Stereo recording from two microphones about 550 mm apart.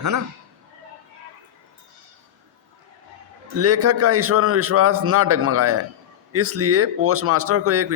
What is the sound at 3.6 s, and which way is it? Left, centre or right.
Speech, right.